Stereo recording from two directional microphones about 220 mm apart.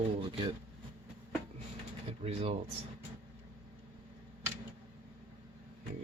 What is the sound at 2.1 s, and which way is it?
Speech, 25° right (ahead or behind).